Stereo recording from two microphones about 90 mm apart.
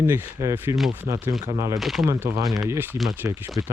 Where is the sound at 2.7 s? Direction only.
25° right (ahead or behind).